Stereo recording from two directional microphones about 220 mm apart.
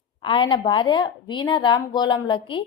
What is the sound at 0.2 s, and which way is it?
A woman's voice, 20° left (ahead or behind).